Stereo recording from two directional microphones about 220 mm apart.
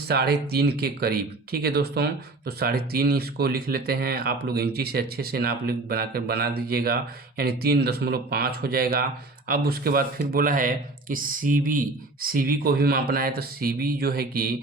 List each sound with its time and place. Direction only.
0.1 s speech: 45° right (ahead or behind)